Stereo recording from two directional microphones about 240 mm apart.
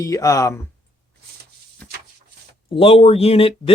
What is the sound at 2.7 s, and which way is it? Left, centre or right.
Speech, left.